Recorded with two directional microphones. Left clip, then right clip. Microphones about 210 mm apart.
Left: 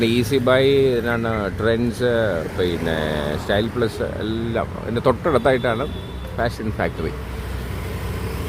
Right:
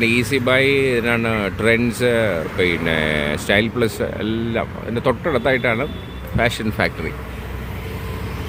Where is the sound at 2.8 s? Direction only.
25° right (ahead or behind).